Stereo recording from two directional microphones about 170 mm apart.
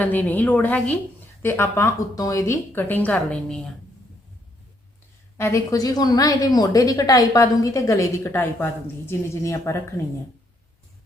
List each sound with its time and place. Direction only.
0.0 s a woman's voice: 10° left (ahead or behind)
5.4 s speech: 20° left (ahead or behind)